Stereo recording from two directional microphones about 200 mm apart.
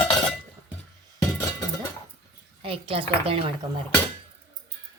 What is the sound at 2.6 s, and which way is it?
Speech, 25° right (ahead or behind).